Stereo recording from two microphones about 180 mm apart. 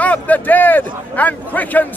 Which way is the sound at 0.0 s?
10° left (ahead or behind).